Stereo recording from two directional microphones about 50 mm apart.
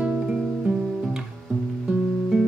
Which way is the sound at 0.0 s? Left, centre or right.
Right.